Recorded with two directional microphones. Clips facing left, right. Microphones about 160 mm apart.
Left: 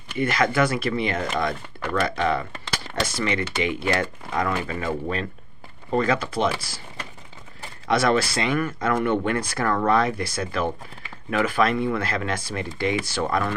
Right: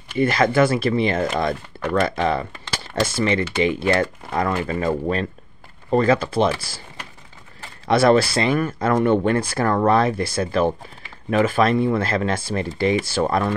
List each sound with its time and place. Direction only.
0.2 s speech: 30° right (ahead or behind)
7.9 s speech: 30° right (ahead or behind)